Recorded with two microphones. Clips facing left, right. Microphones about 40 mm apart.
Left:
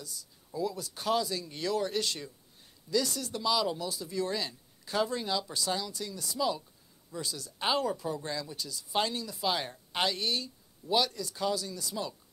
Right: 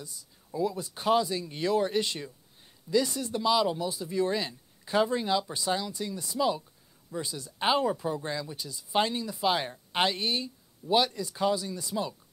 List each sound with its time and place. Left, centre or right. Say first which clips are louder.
0.0 s speech: right 1 dB; right